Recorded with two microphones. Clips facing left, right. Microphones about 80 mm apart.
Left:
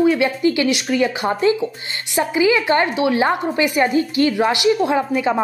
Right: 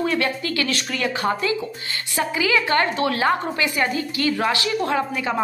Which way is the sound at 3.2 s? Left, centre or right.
Left.